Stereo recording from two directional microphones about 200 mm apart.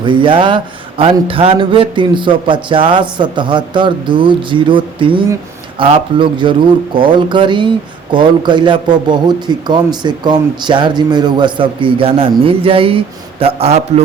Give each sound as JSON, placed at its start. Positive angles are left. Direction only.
{"t": 0.0, "sound": "a man's voice", "side_deg": -25}